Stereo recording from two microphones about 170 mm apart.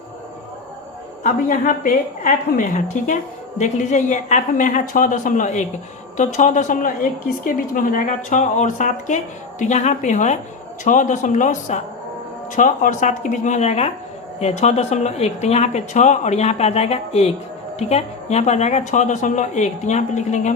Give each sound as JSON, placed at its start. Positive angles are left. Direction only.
{"t": 1.2, "sound": "speech", "side_deg": 50}